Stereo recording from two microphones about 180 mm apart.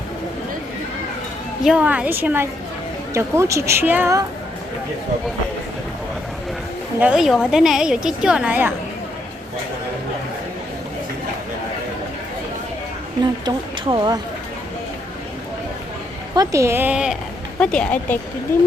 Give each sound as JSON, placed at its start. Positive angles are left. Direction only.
{"t": 1.6, "sound": "speech", "side_deg": -5}
{"t": 7.0, "sound": "a woman's voice", "side_deg": -5}
{"t": 13.4, "sound": "a sound", "side_deg": -25}
{"t": 16.3, "sound": "speech", "side_deg": -20}
{"t": 17.6, "sound": "a woman's voice", "side_deg": 5}